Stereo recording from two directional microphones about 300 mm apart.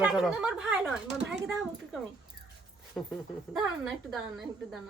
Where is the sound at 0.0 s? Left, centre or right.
Centre.